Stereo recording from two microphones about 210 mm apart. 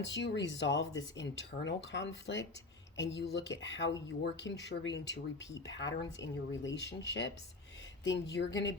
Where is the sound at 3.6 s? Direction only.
60° left (ahead or behind).